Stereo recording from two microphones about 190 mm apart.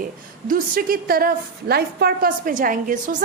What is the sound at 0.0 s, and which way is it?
A woman's voice, 45° right (ahead or behind).